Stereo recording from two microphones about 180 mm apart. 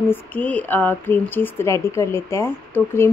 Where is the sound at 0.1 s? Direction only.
10° left (ahead or behind).